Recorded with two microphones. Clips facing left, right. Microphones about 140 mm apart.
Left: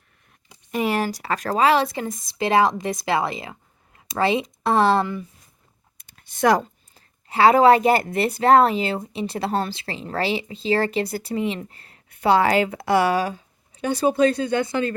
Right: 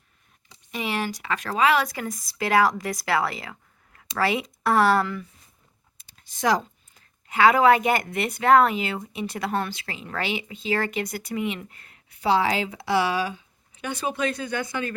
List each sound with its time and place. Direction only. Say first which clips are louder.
0.7 s speech: left 6 dB; 45° left (ahead or behind); by 5.2 s 25° left (ahead or behind)
6.0 s computer keyboard: left 6 dB; 55° left (ahead or behind)
6.9 s speech: left 2 dB; 35° left (ahead or behind)
12.0 s speech: left 4 dB; 55° left (ahead or behind); by 14.9 s 25° left (ahead or behind)